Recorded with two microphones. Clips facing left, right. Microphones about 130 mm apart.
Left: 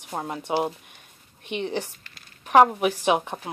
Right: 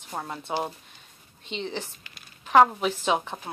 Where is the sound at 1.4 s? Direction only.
60° left (ahead or behind).